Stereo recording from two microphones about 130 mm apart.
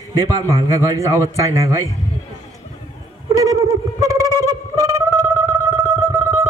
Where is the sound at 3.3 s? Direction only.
25° right (ahead or behind).